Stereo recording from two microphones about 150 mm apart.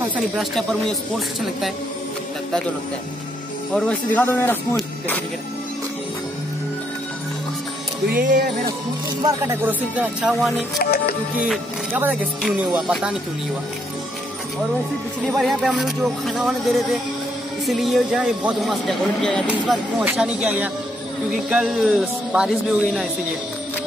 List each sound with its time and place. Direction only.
0.4 s speech: 5° left (ahead or behind)
3.7 s speech: 10° left (ahead or behind)
8.1 s speech: 65° right (ahead or behind)
9.2 s speech: 15° right (ahead or behind)
10.8 s music: 90° left
11.3 s speech: centre (ahead or behind)
11.9 s speech: 10° right (ahead or behind)
15.2 s speech: centre (ahead or behind)
19.4 s speech: 10° right (ahead or behind)